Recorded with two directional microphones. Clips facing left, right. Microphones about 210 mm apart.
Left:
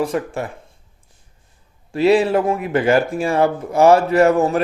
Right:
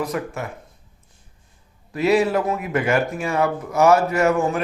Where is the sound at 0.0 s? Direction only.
30° left (ahead or behind).